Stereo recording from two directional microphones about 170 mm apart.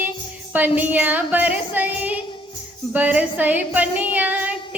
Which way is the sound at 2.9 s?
10° right (ahead or behind).